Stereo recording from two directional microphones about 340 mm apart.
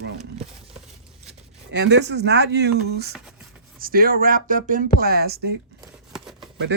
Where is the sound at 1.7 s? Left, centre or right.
Right.